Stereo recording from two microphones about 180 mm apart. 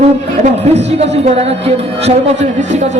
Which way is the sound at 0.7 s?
35° right (ahead or behind).